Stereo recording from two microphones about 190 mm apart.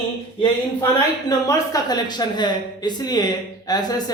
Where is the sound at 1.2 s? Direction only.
20° left (ahead or behind).